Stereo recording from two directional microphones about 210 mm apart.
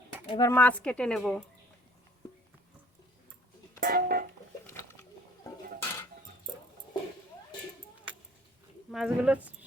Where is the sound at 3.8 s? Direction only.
45° right (ahead or behind).